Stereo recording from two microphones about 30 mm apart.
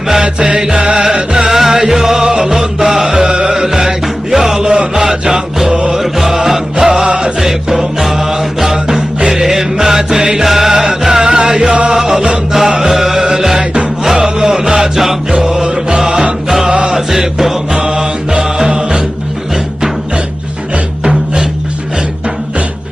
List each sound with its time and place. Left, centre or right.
0.3 s music: right
1.5 s music: centre
7.4 s music: centre
10.4 s music: centre; by 11.9 s right
11.9 s music: centre
15.6 s music: right
17.7 s mantra: right